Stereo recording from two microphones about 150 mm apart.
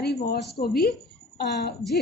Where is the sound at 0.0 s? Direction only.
90° left.